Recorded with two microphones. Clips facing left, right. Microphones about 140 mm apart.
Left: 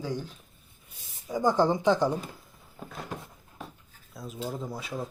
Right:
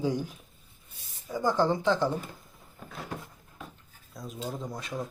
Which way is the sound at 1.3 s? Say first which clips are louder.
Left 2 dB; 20° left (ahead or behind).